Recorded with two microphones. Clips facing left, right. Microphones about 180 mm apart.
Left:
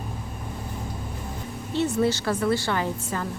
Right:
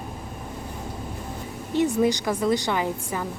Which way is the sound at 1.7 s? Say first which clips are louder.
Right 2 dB; 15° right (ahead or behind).